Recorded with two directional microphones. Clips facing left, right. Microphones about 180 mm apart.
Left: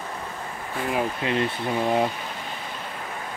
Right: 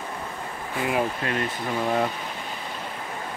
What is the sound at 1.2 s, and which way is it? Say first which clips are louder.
Speech: left 3 dB; 15° left (ahead or behind).